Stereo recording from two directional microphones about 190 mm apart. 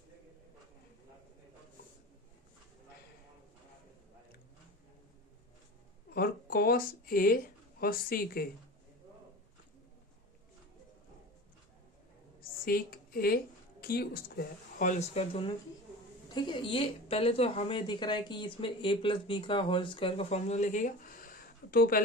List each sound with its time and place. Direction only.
6.1 s speech: 50° left (ahead or behind)
12.4 s a sound: 50° left (ahead or behind)
13.8 s a woman's voice: 55° left (ahead or behind)